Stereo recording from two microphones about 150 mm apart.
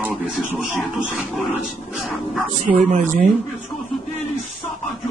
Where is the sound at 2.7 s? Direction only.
60° right (ahead or behind).